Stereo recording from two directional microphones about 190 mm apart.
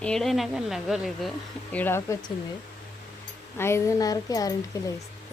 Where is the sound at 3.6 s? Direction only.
15° left (ahead or behind).